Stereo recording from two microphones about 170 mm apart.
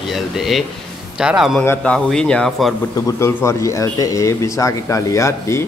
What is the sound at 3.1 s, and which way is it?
Speech, 15° left (ahead or behind).